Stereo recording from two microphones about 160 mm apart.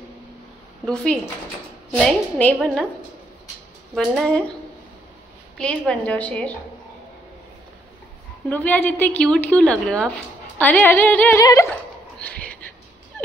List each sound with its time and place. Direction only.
0.8 s a woman's voice: 5° left (ahead or behind)
3.9 s a woman's voice: centre (ahead or behind)
5.6 s speech: 5° left (ahead or behind)
8.5 s speech: 10° left (ahead or behind)
12.2 s a sound: 10° left (ahead or behind)